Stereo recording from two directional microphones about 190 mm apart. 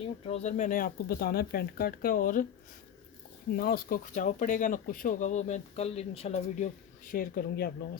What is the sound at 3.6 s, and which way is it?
Speech, 50° left (ahead or behind).